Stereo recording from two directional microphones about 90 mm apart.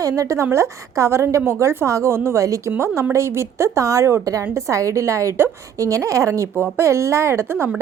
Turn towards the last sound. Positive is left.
turn(degrees=-25)  # may be behind; listen again after turning